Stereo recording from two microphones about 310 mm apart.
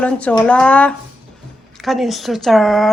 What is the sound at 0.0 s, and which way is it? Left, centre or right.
Speech, centre.